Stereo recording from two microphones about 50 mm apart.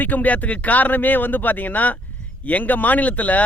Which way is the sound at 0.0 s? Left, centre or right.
Left.